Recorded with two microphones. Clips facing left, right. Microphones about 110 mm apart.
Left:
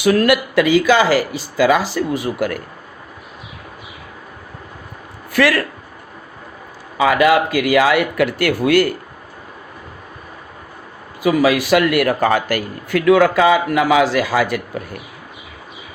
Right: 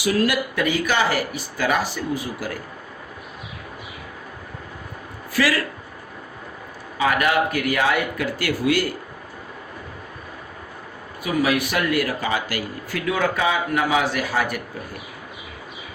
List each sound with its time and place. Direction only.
0.0 s speech: 60° left (ahead or behind); by 1.4 s 90° left
1.8 s speech: 80° left
5.3 s speech: 60° left (ahead or behind)
7.2 s speech: 90° left; by 9.0 s 60° left (ahead or behind)
11.2 s speech: 90° left